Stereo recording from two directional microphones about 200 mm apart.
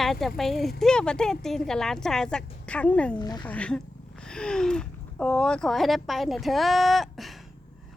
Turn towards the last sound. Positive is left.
turn(degrees=0)  # may be behind; listen again after turning